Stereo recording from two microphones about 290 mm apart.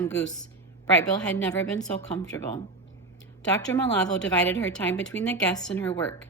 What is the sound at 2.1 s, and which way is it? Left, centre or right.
Speech, centre.